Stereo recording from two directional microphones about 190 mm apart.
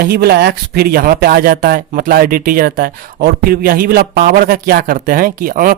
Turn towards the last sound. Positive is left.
turn(degrees=-45)  # may be behind; listen again after turning